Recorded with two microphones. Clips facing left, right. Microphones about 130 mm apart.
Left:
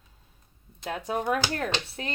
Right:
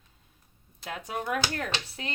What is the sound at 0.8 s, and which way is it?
Speech, 30° left (ahead or behind).